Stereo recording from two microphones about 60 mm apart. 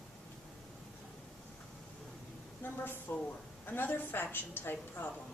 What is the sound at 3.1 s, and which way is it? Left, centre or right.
A woman's voice, left.